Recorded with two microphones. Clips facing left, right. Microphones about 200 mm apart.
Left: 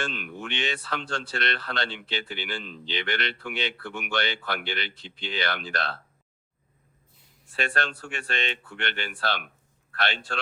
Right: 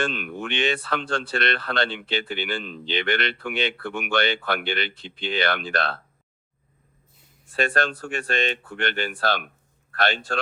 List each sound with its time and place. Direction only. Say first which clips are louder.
0.0 s speech: right 6 dB; 60° right (ahead or behind)
7.5 s speech: right 6 dB; 45° right (ahead or behind)